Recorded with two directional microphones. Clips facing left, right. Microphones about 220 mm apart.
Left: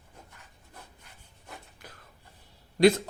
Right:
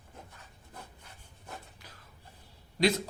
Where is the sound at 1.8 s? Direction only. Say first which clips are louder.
Left 5 dB; 50° left (ahead or behind).